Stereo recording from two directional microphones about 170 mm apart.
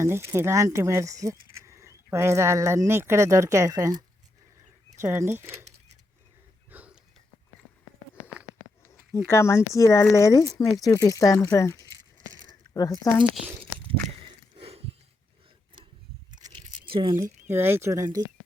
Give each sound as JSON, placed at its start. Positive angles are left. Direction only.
{"t": 0.0, "sound": "speech", "side_deg": -15}
{"t": 6.7, "sound": "a sound", "side_deg": -10}
{"t": 8.9, "sound": "speech", "side_deg": 15}
{"t": 14.5, "sound": "a sound", "side_deg": -35}
{"t": 16.9, "sound": "speech", "side_deg": -30}
{"t": 17.5, "sound": "speech", "side_deg": -15}